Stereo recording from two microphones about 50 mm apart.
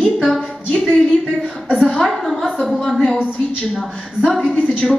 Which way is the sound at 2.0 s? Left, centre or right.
Centre.